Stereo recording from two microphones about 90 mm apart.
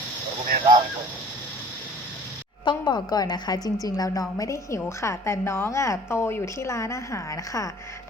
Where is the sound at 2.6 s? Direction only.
60° left (ahead or behind).